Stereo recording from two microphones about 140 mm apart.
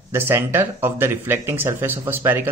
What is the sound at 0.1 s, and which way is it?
Speech, 15° right (ahead or behind).